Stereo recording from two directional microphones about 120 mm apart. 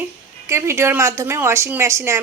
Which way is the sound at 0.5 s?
20° right (ahead or behind).